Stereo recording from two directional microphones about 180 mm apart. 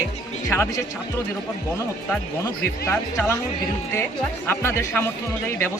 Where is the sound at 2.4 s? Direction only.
15° left (ahead or behind).